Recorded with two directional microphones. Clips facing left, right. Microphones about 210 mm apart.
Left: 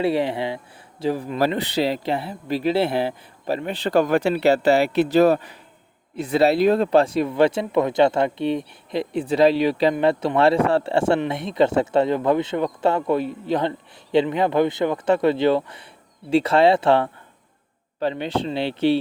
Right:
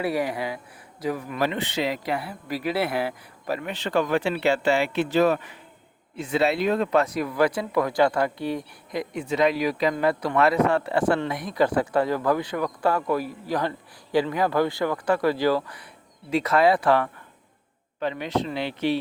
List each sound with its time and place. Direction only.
0.0 s a man's voice: 25° left (ahead or behind)